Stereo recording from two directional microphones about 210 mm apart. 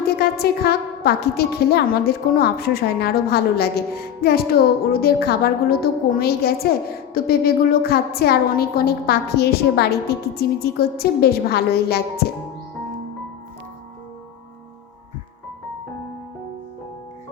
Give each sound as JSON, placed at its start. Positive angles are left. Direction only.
{"t": 0.2, "sound": "a woman's voice", "side_deg": 50}